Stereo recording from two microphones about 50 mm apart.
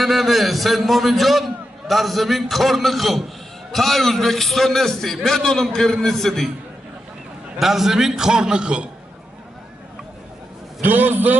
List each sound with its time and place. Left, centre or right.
0.0 s a man's voice: centre
7.5 s a man's voice: centre; by 8.9 s right
10.8 s a man's voice: right